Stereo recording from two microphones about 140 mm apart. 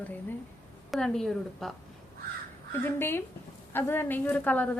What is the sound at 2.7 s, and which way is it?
A woman's voice, 15° left (ahead or behind).